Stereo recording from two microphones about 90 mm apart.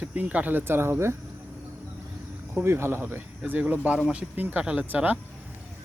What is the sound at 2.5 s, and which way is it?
Speech, 25° right (ahead or behind).